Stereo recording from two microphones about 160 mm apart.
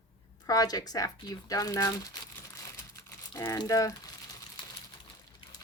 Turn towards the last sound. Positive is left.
turn(degrees=30)  # may be behind; listen again after turning